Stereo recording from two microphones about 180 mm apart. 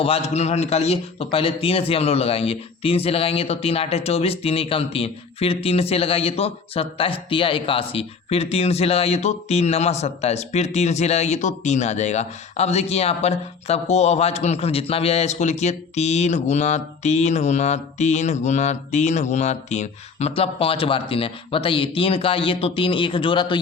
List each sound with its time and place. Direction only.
0.0 s speech: 35° left (ahead or behind)